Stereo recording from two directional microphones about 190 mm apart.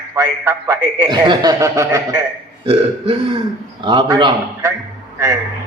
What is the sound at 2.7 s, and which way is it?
Burping, 30° right (ahead or behind).